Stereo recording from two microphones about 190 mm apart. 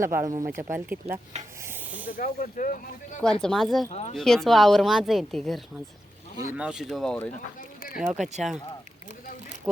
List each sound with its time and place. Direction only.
0.0 s speech: 15° right (ahead or behind)
1.6 s snake: 10° right (ahead or behind)
2.0 s speech: 45° left (ahead or behind)
3.4 s speech: centre (ahead or behind)
6.3 s speech: 15° right (ahead or behind)